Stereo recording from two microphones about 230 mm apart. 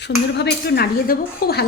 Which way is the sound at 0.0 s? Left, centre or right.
Left.